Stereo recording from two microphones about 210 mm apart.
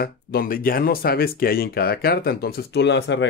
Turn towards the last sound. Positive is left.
turn(degrees=55)  # may be behind; listen again after turning